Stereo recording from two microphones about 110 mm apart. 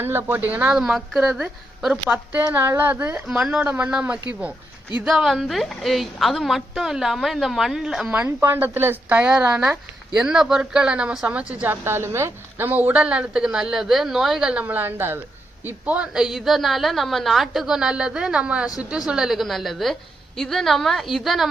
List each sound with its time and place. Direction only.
0.0 s a woman's voice: 20° right (ahead or behind)
3.2 s a woman's voice: 5° right (ahead or behind)
8.4 s a woman's voice: 20° right (ahead or behind); by 21.5 s centre (ahead or behind)